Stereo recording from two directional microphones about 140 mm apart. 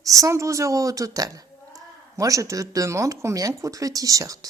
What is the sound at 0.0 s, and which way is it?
A woman's voice, 25° right (ahead or behind).